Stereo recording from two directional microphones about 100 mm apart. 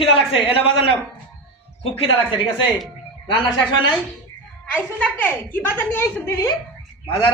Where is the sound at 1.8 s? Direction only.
65° left (ahead or behind).